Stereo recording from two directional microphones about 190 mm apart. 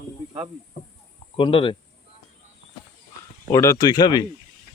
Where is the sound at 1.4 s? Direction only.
25° left (ahead or behind).